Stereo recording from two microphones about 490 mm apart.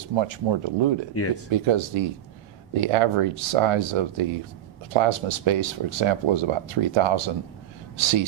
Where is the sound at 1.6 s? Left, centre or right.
Right.